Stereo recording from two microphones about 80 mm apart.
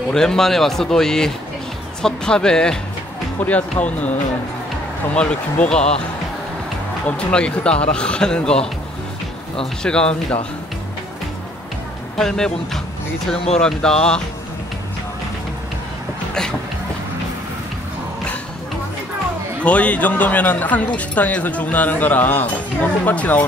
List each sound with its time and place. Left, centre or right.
0.1 s speech: centre
5.1 s speech: centre
7.1 s speech: centre
9.8 s speech: centre
12.2 s speech: centre
19.6 s speech: centre